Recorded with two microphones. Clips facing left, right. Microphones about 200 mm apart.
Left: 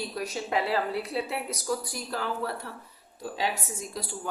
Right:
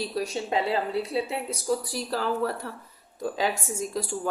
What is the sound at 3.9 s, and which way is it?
Speech, 45° right (ahead or behind).